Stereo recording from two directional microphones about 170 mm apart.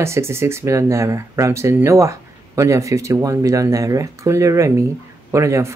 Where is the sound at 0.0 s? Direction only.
15° right (ahead or behind).